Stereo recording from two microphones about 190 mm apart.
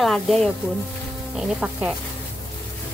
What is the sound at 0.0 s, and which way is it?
Speech, centre (ahead or behind).